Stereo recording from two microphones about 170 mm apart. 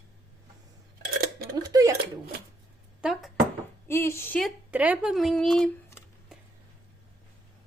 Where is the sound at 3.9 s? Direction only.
15° left (ahead or behind).